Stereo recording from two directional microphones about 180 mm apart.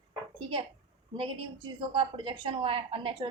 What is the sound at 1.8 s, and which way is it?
A woman's voice, 30° right (ahead or behind).